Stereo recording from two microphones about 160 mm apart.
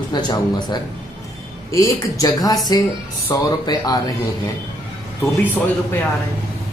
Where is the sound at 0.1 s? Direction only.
25° left (ahead or behind).